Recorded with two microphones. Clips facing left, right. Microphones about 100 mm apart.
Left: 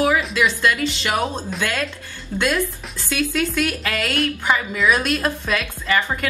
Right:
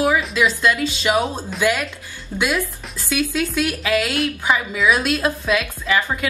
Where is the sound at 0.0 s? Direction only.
Centre (ahead or behind).